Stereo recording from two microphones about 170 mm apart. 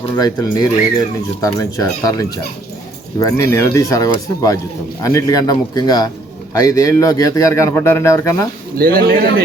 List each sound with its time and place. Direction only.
0.2 s a man's voice: 20° left (ahead or behind)
8.8 s a man's voice: 60° right (ahead or behind)